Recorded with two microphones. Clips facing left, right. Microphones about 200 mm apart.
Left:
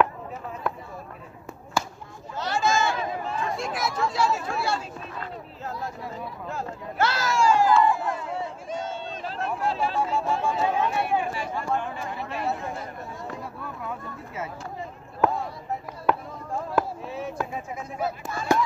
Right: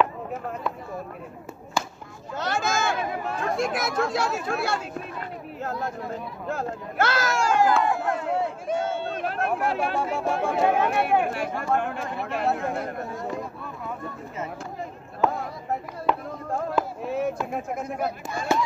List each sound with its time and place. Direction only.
2.3 s chatter: 55° right (ahead or behind)
5.6 s speech: 65° right (ahead or behind)
6.5 s speech: 50° right (ahead or behind)
17.0 s a sound: 55° right (ahead or behind)
17.5 s speech: 60° right (ahead or behind)
18.5 s speech: 15° left (ahead or behind)